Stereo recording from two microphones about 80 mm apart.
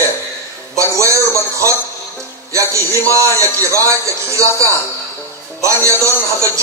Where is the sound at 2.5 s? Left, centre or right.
Right.